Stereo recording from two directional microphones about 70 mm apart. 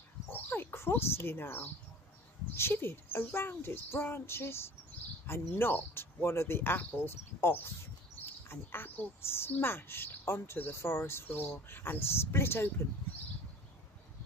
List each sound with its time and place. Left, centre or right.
0.3 s a woman's voice: left